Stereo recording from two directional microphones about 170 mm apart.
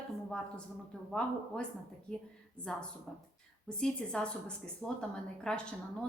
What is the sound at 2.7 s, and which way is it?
Speech, 5° left (ahead or behind).